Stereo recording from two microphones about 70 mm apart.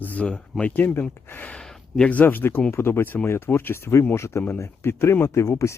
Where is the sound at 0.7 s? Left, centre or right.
Left.